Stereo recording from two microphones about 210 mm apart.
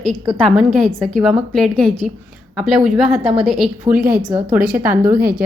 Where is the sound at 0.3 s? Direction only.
Centre (ahead or behind).